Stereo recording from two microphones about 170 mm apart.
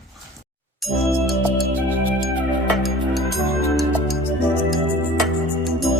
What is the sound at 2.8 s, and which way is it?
Music, centre (ahead or behind).